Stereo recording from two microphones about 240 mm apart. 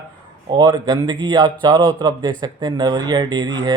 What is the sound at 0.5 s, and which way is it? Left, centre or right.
Speech, centre.